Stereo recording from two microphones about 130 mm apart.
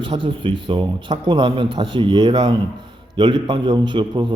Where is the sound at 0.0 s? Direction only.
40° right (ahead or behind).